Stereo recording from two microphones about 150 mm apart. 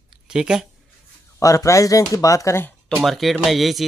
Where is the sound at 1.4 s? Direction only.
20° left (ahead or behind).